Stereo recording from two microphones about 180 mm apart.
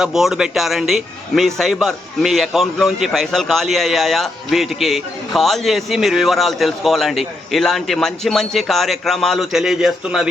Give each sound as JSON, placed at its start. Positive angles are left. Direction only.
{"t": 0.0, "sound": "a man's voice", "side_deg": 0}